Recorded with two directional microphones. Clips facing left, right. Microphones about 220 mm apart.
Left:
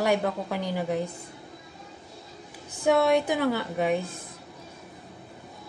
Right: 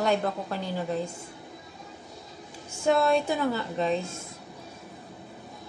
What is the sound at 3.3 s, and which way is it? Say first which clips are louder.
Speech: left 2 dB; 90° left.